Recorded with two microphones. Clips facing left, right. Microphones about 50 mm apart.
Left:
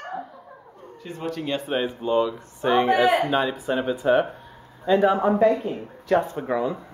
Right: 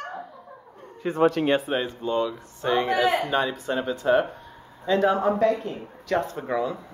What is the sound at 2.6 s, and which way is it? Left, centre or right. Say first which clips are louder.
Speech: left 3 dB; left.